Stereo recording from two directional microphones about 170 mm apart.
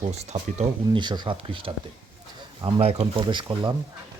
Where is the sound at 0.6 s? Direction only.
30° right (ahead or behind).